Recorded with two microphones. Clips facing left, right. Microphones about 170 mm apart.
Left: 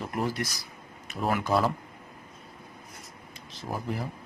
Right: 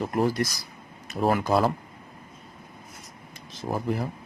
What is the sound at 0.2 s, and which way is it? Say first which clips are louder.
Speech: right 6 dB; 40° right (ahead or behind).